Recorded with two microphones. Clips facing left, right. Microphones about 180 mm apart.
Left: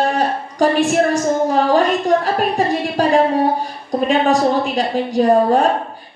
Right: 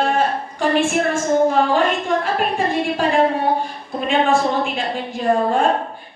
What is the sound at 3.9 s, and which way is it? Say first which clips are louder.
A woman's voice: left 3 dB; 40° left (ahead or behind).